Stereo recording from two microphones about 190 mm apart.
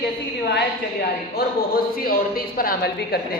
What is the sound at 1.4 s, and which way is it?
A man's voice, 50° left (ahead or behind).